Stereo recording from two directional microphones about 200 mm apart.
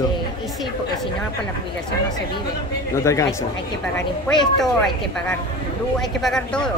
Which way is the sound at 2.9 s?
15° left (ahead or behind).